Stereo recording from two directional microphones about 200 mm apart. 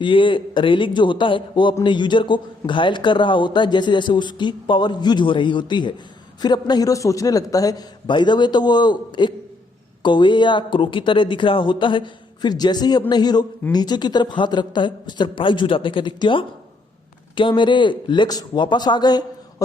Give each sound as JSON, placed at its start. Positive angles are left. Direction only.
{"t": 0.0, "sound": "speech", "side_deg": 25}